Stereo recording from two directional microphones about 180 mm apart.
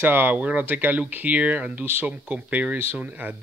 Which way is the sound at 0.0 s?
10° right (ahead or behind).